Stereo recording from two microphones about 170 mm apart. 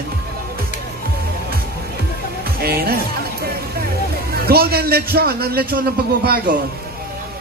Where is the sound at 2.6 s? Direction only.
65° right (ahead or behind).